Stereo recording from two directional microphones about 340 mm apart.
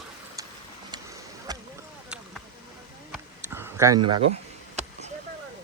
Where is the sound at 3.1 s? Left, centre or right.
Centre.